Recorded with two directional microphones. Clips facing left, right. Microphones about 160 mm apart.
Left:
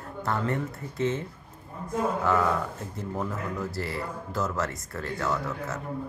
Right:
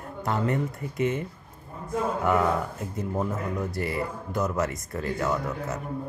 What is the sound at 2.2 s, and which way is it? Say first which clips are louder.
Speech: right 3 dB; 15° right (ahead or behind).